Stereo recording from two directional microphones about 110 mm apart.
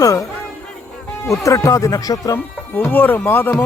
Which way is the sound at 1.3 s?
30° left (ahead or behind).